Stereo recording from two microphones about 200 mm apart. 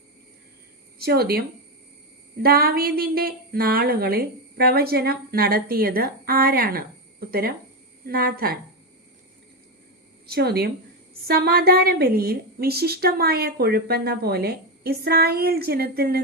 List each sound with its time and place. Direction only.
0.9 s a woman's voice: 50° right (ahead or behind)
10.2 s a woman's voice: 50° right (ahead or behind)